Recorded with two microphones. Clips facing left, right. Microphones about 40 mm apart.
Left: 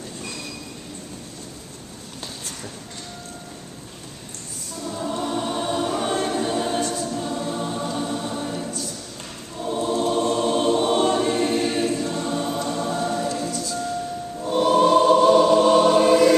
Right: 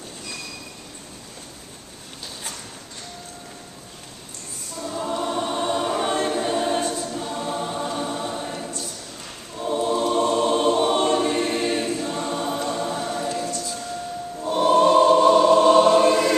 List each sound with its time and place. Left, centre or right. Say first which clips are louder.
4.7 s choir: right 1 dB; centre
10.1 s music: right 1 dB; centre
10.8 s choir: even; centre
14.4 s music: right 1 dB; centre